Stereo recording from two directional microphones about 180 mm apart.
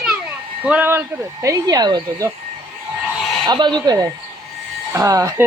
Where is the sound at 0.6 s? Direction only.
10° right (ahead or behind).